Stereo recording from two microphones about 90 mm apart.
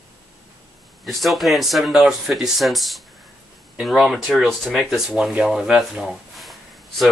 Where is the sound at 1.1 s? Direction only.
Centre (ahead or behind).